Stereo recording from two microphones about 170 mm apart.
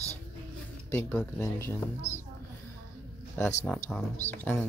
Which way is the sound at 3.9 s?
10° left (ahead or behind).